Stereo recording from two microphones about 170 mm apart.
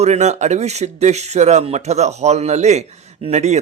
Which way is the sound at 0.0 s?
40° right (ahead or behind).